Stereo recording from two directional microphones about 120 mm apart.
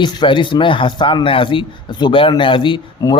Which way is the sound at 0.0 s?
40° left (ahead or behind).